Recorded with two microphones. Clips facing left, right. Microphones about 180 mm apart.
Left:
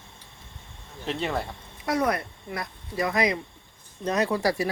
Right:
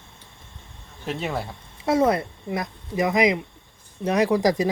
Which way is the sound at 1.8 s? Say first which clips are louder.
Right 5 dB; 25° right (ahead or behind).